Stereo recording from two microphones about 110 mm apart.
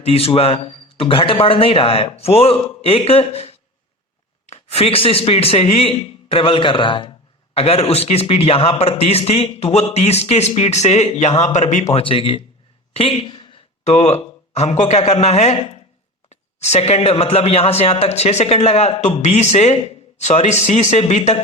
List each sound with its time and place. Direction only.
0.0 s a man's voice: 60° left (ahead or behind)
7.5 s a man's voice: 65° left (ahead or behind); by 11.9 s 90° left
11.9 s a man's voice: 55° left (ahead or behind)
12.9 s a sound: 55° left (ahead or behind)
13.8 s a man's voice: 90° left